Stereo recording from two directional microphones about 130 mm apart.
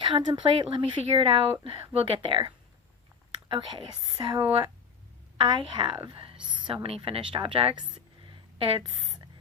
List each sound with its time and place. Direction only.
0.0 s speech: 35° right (ahead or behind)
3.5 s speech: 35° right (ahead or behind)
6.1 s a sound: 40° right (ahead or behind)
6.8 s speech: 45° right (ahead or behind)